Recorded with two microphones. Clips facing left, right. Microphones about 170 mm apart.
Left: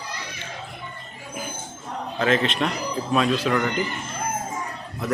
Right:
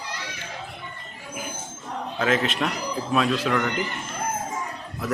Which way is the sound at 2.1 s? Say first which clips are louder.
Left 2 dB; 5° right (ahead or behind).